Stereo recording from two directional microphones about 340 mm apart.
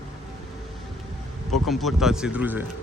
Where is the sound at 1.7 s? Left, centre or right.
Centre.